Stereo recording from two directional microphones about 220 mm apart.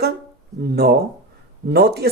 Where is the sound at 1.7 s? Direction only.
45° right (ahead or behind).